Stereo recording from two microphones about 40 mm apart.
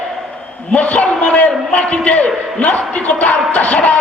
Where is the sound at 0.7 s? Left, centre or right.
Left.